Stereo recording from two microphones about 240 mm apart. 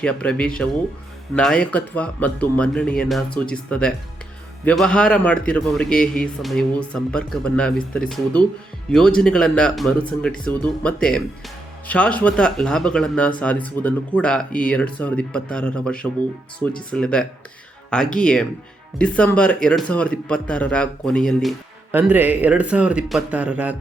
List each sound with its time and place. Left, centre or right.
0.0 s speech: centre